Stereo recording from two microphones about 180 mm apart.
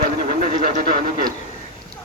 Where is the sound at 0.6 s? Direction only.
50° right (ahead or behind).